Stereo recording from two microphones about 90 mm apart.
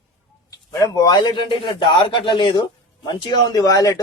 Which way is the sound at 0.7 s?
40° left (ahead or behind).